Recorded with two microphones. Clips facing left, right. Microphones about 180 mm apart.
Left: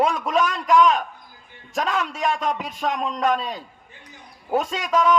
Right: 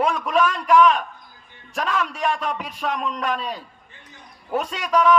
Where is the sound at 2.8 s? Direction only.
35° left (ahead or behind).